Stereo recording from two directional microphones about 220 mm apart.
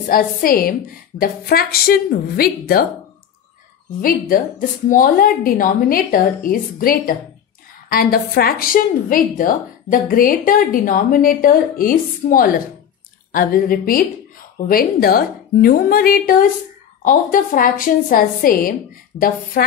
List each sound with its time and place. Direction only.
0.1 s a woman's voice: 40° left (ahead or behind)
4.0 s a woman's voice: 40° left (ahead or behind)